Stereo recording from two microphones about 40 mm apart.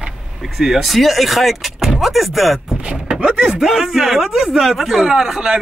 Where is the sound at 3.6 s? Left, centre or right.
Centre.